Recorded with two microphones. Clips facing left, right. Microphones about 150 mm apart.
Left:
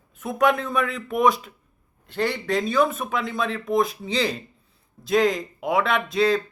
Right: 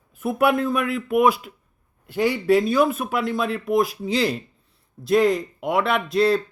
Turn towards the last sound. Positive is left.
turn(degrees=0)  # may be behind; listen again after turning